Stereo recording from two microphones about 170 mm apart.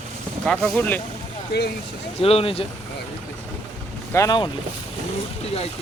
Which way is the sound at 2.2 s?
35° left (ahead or behind).